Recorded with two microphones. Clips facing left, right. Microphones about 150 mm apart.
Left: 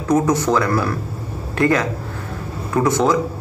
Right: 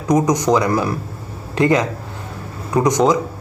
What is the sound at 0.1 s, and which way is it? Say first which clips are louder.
Speech: right 1 dB; 15° right (ahead or behind).